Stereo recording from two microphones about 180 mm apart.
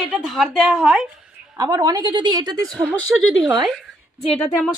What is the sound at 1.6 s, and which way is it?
A woman's voice, 20° right (ahead or behind).